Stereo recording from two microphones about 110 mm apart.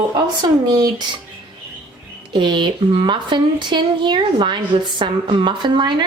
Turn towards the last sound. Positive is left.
turn(degrees=-45)  # may be behind; listen again after turning